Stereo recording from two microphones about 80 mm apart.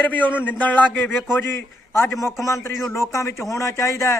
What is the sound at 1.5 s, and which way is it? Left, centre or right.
A man's voice, left.